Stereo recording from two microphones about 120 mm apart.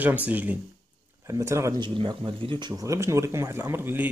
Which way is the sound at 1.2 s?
25° right (ahead or behind).